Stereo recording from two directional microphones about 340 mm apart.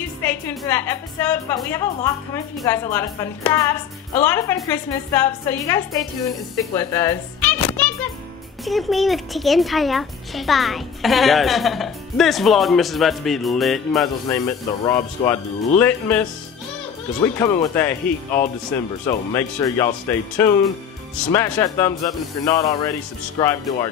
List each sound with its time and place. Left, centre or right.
0.2 s a woman's voice: centre
17.2 s a child's voice: centre